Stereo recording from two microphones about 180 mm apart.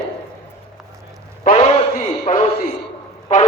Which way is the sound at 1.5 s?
55° left (ahead or behind).